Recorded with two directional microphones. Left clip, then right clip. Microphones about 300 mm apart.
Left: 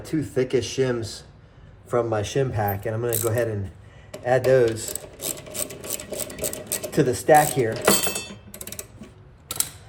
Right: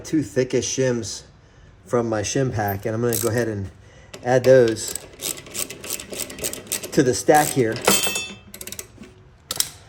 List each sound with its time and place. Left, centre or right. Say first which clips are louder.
0.0 s speech: right 3 dB; right
4.9 s sewing machine: right 2 dB; centre
6.9 s speech: right 1 dB; right
7.7 s a sound: right 2 dB; centre